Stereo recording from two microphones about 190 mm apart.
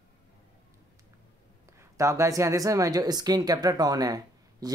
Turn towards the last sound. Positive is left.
turn(degrees=-20)  # may be behind; listen again after turning